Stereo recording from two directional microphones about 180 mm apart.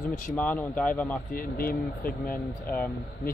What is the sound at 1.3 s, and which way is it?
Speech, 50° left (ahead or behind).